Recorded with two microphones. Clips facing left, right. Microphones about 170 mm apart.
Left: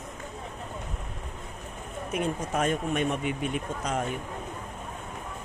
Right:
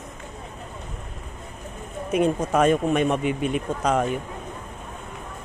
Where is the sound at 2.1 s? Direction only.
90° right.